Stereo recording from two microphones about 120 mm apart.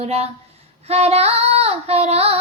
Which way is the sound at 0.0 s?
60° right (ahead or behind).